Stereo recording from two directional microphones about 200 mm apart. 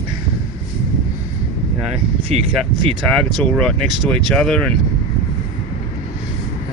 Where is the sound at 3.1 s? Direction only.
Centre (ahead or behind).